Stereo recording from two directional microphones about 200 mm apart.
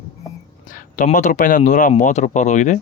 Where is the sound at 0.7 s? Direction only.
40° left (ahead or behind).